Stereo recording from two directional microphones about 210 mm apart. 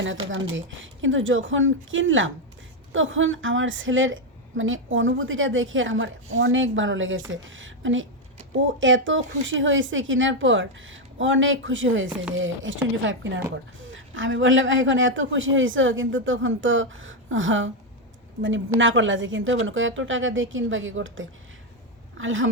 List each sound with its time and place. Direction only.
0.5 s a woman's voice: 65° right (ahead or behind)
18.8 s speech: 65° right (ahead or behind)